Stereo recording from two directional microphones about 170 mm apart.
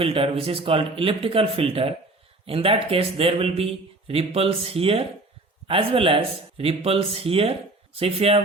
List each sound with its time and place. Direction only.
0.0 s a man's voice: 35° right (ahead or behind)